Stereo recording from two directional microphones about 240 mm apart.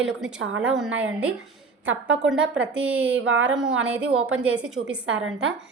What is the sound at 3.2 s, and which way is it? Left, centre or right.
Speech, right.